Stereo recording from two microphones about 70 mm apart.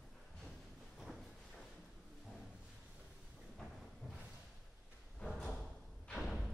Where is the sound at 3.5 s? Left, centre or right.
Centre.